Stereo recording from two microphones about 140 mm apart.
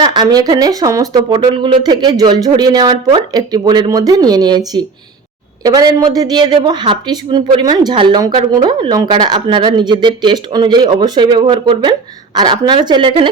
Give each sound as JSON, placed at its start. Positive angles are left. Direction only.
{"t": 0.0, "sound": "a woman's voice", "side_deg": -30}